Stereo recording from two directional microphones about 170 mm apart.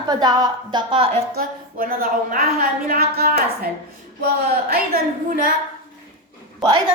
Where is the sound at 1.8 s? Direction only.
55° right (ahead or behind).